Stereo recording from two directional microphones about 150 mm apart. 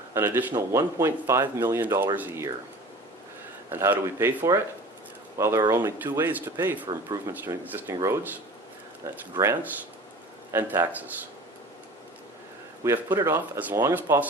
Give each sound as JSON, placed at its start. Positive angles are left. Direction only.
{"t": 0.1, "sound": "speech", "side_deg": -15}
{"t": 3.7, "sound": "speech", "side_deg": -15}
{"t": 9.3, "sound": "speech", "side_deg": -20}
{"t": 12.8, "sound": "speech", "side_deg": -20}